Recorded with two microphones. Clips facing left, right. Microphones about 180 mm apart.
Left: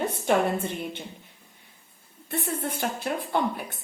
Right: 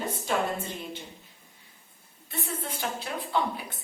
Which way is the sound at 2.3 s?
55° left (ahead or behind).